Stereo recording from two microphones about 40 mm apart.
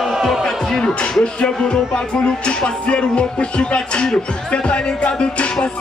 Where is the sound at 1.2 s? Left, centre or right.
Left.